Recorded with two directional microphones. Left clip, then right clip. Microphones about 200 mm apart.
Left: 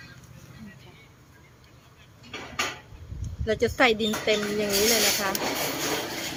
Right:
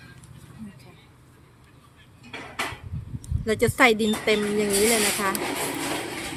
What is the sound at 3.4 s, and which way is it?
Speech, 55° right (ahead or behind).